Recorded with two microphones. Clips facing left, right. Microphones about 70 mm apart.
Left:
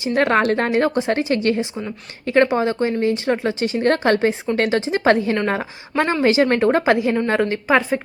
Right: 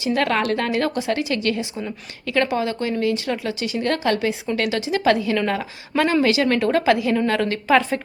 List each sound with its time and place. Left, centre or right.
0.0 s a woman's voice: left